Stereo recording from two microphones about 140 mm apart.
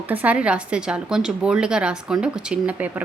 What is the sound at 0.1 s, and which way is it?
Speech, 10° right (ahead or behind).